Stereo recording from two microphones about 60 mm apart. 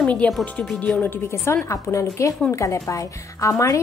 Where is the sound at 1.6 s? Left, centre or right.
Left.